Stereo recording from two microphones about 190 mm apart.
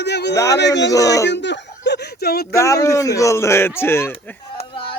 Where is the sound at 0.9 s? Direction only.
15° left (ahead or behind).